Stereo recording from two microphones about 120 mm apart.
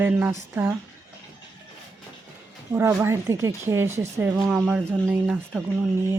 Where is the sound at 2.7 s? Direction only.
20° right (ahead or behind).